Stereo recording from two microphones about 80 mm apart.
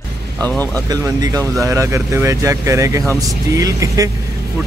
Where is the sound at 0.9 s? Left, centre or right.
Right.